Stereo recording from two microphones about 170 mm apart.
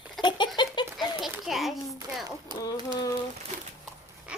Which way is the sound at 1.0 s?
Centre (ahead or behind).